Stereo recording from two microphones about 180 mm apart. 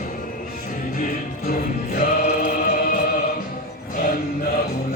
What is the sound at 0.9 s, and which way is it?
Music, 50° left (ahead or behind).